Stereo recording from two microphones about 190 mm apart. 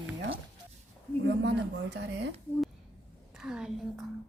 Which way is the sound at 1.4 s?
65° right (ahead or behind).